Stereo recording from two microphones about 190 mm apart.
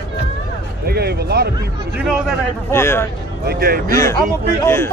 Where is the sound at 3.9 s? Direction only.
15° left (ahead or behind).